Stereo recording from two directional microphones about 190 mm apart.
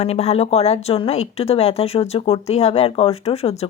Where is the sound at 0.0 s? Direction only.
35° left (ahead or behind).